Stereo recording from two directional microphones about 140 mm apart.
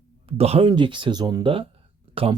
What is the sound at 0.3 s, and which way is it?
Speech, 45° right (ahead or behind).